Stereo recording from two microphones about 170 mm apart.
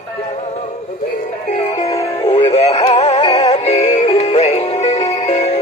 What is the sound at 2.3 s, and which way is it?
Synthetic singing, 35° left (ahead or behind).